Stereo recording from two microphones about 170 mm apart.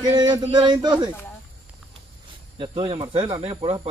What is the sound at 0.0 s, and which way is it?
Speech, 25° right (ahead or behind).